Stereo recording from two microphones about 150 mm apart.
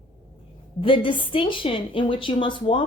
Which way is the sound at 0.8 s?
35° left (ahead or behind).